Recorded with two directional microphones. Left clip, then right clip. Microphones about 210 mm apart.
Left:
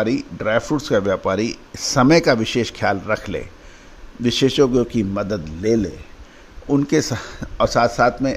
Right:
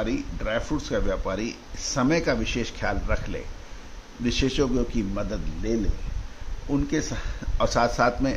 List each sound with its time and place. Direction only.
0.0 s speech: 40° left (ahead or behind)
7.6 s a man's voice: 25° left (ahead or behind)